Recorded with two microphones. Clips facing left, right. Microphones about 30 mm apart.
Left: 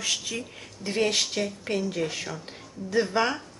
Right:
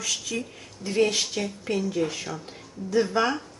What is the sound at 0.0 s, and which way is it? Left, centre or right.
Speech, left.